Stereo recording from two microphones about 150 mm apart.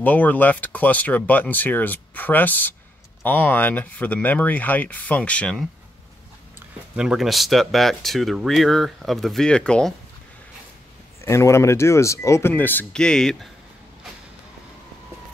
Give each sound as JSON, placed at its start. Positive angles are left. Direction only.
{"t": 0.0, "sound": "speech", "side_deg": 10}
{"t": 7.0, "sound": "speech", "side_deg": -5}
{"t": 11.1, "sound": "speech", "side_deg": 20}